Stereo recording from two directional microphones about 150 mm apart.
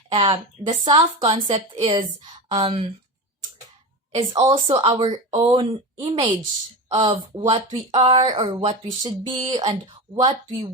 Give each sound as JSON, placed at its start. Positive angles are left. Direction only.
{"t": 0.1, "sound": "a woman's voice", "side_deg": -35}
{"t": 4.1, "sound": "a woman's voice", "side_deg": -35}
{"t": 7.3, "sound": "a woman's voice", "side_deg": -35}
{"t": 8.4, "sound": "a woman's voice", "side_deg": -30}